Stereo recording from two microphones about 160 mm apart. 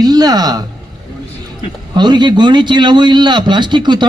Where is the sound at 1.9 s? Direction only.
25° right (ahead or behind).